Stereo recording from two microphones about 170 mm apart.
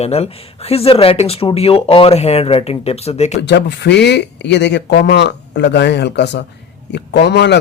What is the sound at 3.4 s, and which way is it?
Speech, 90° left.